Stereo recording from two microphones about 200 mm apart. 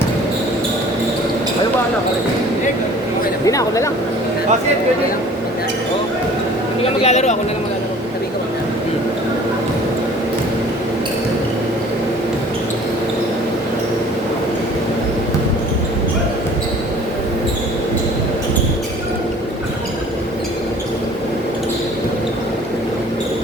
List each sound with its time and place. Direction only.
3.4 s speech: 15° left (ahead or behind)
6.8 s a man's voice: 35° left (ahead or behind)